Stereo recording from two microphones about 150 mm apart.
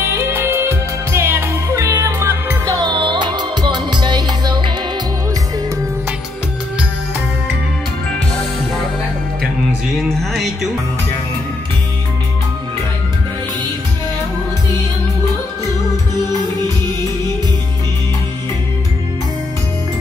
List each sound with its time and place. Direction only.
0.0 s music: 15° right (ahead or behind)
9.9 s music: centre (ahead or behind)